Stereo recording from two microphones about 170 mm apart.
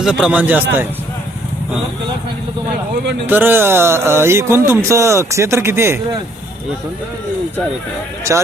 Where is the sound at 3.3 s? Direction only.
10° right (ahead or behind).